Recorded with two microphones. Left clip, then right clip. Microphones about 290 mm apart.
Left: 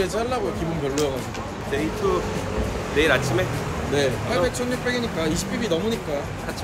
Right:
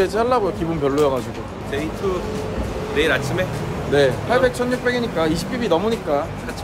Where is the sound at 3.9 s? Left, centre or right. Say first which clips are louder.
Right 7 dB; centre.